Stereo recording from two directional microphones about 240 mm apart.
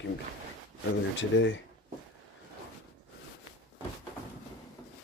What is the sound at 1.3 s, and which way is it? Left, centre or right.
Speech, left.